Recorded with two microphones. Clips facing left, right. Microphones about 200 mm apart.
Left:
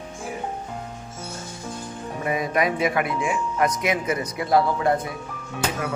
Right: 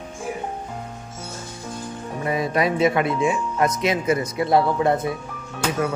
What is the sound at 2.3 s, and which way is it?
Speech, 30° right (ahead or behind).